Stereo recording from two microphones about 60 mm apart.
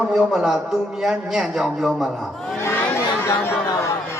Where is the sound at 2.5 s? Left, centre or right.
Left.